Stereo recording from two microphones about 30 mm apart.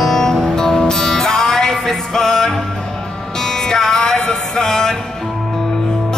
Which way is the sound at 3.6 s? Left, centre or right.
Centre.